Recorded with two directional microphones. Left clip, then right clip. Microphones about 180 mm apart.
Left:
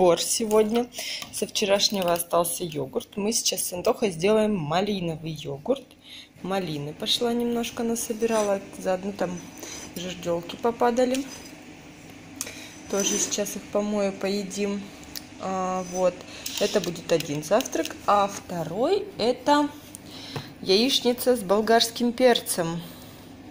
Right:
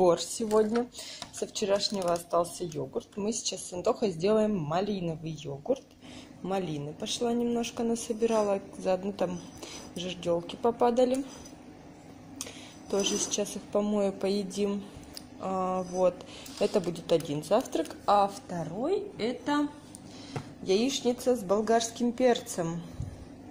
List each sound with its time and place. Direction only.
0.0 s speech: 5° right (ahead or behind)
9.9 s speech: 15° right (ahead or behind)
12.4 s a sound: centre (ahead or behind)
13.7 s speech: 5° right (ahead or behind)
15.4 s speech: 5° right (ahead or behind)
18.5 s a woman's voice: 5° left (ahead or behind)
18.9 s a woman's voice: 20° left (ahead or behind)
20.6 s speech: 5° right (ahead or behind)